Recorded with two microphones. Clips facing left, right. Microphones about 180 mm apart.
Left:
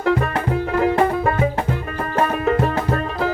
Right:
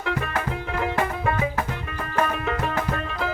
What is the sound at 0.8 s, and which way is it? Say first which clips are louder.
Music: left 8 dB; 40° left (ahead or behind).